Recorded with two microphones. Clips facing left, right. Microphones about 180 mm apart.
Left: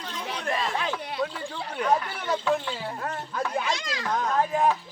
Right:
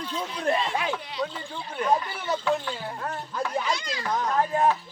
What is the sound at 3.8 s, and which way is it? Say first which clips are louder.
Speech: even; 90° left.